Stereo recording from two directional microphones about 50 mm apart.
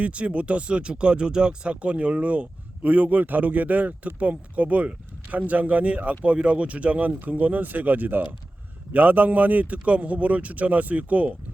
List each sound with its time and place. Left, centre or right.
0.0 s speech: right